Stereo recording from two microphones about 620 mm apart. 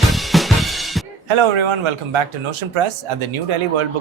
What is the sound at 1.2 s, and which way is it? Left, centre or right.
Speech, right.